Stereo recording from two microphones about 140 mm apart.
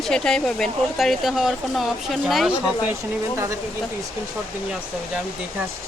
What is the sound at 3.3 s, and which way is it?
Speech, 20° right (ahead or behind).